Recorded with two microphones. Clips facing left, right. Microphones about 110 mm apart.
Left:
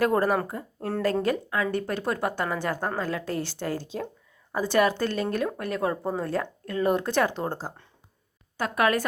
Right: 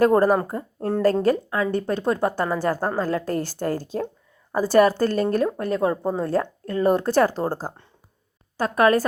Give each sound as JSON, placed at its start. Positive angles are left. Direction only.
{"t": 0.0, "sound": "a woman's voice", "side_deg": -40}